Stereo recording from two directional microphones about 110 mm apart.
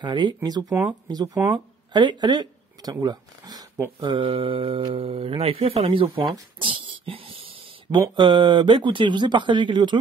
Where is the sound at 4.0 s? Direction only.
45° right (ahead or behind).